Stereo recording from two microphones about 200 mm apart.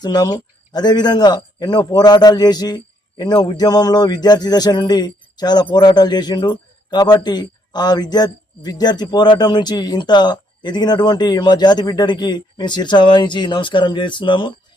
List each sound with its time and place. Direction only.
0.0 s a man's voice: 20° left (ahead or behind)